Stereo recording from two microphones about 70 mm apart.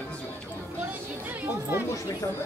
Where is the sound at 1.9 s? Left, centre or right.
Left.